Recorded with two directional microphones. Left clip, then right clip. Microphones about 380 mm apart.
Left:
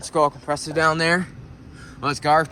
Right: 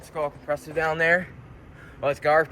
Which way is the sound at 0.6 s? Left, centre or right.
Left.